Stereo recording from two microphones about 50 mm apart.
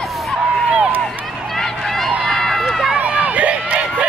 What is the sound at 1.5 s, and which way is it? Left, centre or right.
Run, centre.